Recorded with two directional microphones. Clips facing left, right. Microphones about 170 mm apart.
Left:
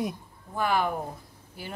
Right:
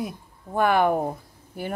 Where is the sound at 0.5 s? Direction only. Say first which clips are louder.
Right 7 dB; 60° right (ahead or behind).